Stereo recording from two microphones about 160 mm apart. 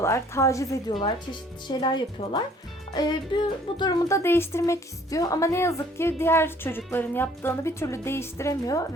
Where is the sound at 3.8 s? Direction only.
20° left (ahead or behind).